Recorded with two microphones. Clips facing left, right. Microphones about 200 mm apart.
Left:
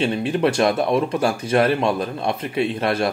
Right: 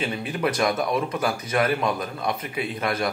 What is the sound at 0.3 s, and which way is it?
Speech, 30° left (ahead or behind).